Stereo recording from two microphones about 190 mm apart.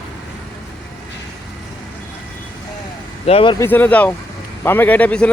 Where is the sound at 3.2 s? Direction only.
30° left (ahead or behind).